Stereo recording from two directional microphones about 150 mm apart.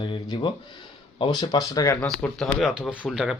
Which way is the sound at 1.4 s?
25° left (ahead or behind).